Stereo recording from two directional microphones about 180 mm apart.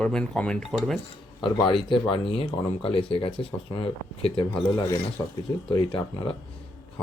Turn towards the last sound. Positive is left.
turn(degrees=30)  # may be behind; listen again after turning